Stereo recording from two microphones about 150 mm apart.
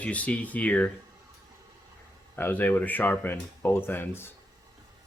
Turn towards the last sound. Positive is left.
turn(degrees=15)  # may be behind; listen again after turning